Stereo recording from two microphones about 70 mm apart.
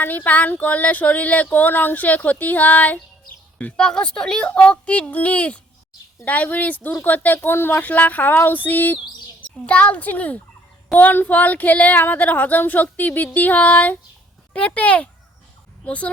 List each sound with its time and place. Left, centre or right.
0.0 s a woman's voice: left